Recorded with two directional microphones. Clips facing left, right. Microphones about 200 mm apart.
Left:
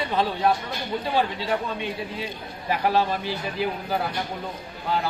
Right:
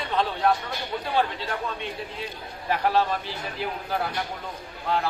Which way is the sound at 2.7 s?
5° left (ahead or behind).